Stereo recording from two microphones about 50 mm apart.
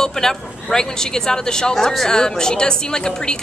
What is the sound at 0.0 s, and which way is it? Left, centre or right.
Speech, centre.